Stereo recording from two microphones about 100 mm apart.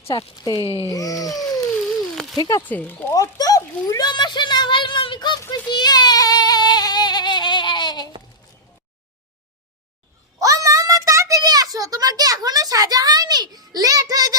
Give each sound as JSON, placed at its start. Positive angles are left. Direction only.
{"t": 0.1, "sound": "speech", "side_deg": 45}
{"t": 0.6, "sound": "speech", "side_deg": 65}
{"t": 0.9, "sound": "a sound", "side_deg": 35}
{"t": 2.4, "sound": "speech", "side_deg": 35}
{"t": 2.6, "sound": "speech", "side_deg": 15}
{"t": 3.1, "sound": "speech", "side_deg": 35}
{"t": 4.1, "sound": "speech", "side_deg": 50}
{"t": 5.5, "sound": "a sound", "side_deg": 45}
{"t": 10.4, "sound": "a sound", "side_deg": -35}